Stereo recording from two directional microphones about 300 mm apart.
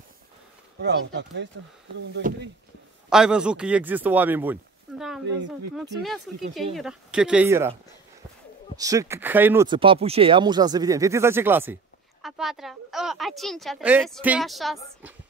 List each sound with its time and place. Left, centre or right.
0.7 s speech: right
3.1 s speech: centre
8.7 s speech: centre